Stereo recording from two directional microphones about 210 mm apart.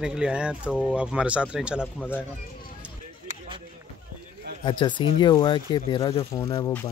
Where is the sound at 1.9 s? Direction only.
10° left (ahead or behind).